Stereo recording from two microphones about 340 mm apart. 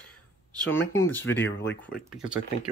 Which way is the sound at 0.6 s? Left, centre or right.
Centre.